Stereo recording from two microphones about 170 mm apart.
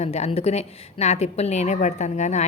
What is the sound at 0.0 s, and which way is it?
A woman's voice, 40° left (ahead or behind).